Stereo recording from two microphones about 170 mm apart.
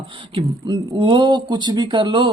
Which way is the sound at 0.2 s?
25° right (ahead or behind).